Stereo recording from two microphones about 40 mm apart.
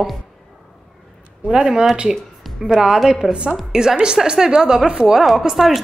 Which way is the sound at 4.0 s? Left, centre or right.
Right.